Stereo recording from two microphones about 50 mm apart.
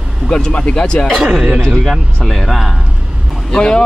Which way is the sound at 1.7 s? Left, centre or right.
Centre.